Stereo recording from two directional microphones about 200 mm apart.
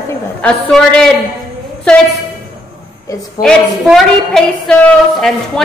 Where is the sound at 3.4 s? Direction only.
Centre (ahead or behind).